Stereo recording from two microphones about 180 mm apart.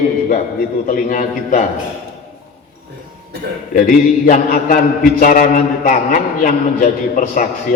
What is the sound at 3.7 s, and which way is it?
A man's voice, 50° left (ahead or behind).